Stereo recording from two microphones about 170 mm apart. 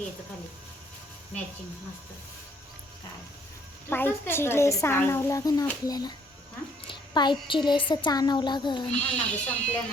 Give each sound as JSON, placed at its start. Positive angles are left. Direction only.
{"t": 3.8, "sound": "a woman's voice", "side_deg": 10}
{"t": 8.9, "sound": "a woman's voice", "side_deg": 5}